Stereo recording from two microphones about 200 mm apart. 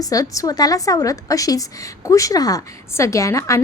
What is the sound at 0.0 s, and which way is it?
Speech, 20° left (ahead or behind).